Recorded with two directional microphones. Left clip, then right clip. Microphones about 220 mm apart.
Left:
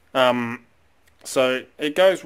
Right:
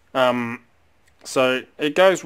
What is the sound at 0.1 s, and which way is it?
Speech, centre (ahead or behind).